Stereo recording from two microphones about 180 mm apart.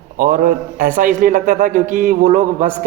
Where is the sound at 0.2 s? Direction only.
50° right (ahead or behind).